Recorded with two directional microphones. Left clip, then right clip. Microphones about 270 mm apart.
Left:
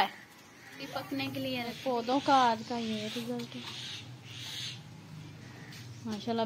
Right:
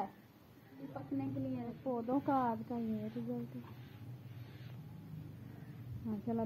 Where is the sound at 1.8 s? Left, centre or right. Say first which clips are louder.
Left 6 dB; left.